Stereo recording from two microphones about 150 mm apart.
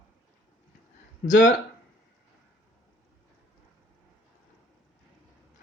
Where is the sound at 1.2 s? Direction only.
60° left (ahead or behind).